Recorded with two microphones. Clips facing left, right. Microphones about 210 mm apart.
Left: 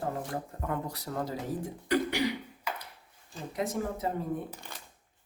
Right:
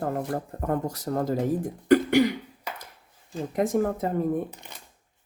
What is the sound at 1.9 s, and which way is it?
Cough, 50° right (ahead or behind).